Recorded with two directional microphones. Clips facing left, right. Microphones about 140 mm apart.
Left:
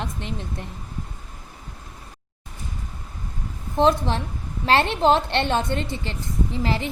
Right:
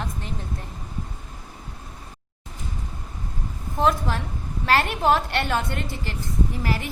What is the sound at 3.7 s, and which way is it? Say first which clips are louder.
A woman's voice: left 3 dB; 25° left (ahead or behind).